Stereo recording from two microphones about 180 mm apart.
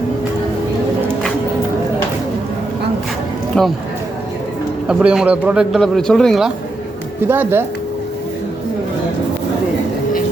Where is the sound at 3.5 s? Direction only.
5° left (ahead or behind).